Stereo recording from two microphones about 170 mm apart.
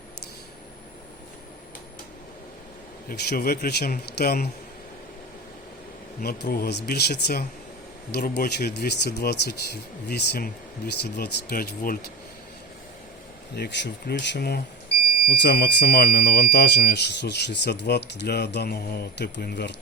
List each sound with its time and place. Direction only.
3.1 s speech: 60° left (ahead or behind)
6.1 s speech: 65° left (ahead or behind)
13.6 s speech: 90° left